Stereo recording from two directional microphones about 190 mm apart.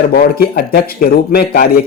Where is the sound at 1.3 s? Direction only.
55° left (ahead or behind).